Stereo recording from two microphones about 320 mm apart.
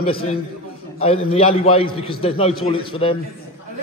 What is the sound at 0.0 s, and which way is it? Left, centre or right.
A man's voice, centre.